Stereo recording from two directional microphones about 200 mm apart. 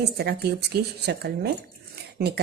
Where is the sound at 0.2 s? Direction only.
50° right (ahead or behind).